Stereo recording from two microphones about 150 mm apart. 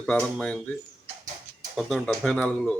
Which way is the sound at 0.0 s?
5° left (ahead or behind).